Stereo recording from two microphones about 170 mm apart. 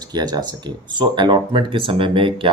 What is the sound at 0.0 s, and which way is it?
Speech, 25° right (ahead or behind).